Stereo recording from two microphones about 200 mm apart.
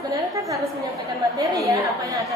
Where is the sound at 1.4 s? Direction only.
15° right (ahead or behind).